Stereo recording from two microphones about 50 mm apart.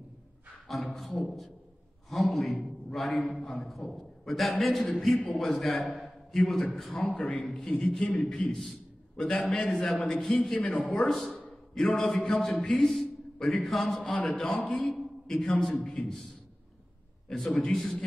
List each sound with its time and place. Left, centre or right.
0.7 s a man's voice: centre
7.3 s a man's voice: left
7.8 s a man's voice: centre
10.6 s a man's voice: left
11.0 s a man's voice: centre
17.3 s a man's voice: centre